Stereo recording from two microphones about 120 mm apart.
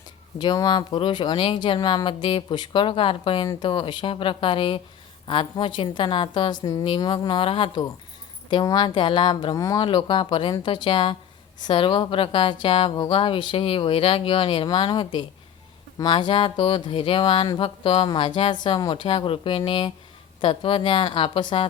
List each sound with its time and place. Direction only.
0.3 s a woman's voice: 35° left (ahead or behind)